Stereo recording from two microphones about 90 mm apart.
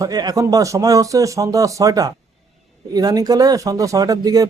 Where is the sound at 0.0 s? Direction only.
45° right (ahead or behind).